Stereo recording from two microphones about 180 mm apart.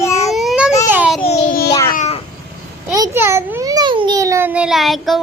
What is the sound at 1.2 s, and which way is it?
Babbling, 35° left (ahead or behind).